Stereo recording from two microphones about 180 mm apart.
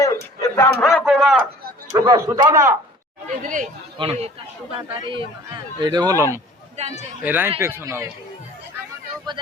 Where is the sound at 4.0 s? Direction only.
35° right (ahead or behind); by 6.4 s 15° right (ahead or behind).